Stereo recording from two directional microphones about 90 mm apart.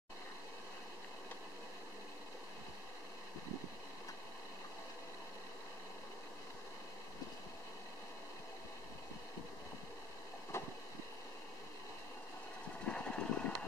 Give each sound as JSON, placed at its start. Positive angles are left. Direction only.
{"t": 10.5, "sound": "vehicle", "side_deg": 30}
{"t": 12.8, "sound": "vehicle", "side_deg": 10}